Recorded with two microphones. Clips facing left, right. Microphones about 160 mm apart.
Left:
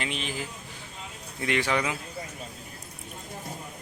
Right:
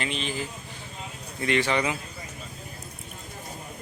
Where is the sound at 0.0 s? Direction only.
10° left (ahead or behind).